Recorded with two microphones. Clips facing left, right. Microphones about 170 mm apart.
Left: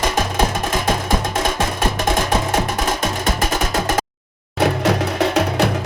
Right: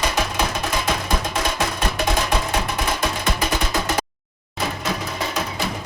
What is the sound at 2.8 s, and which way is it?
Music, 45° left (ahead or behind).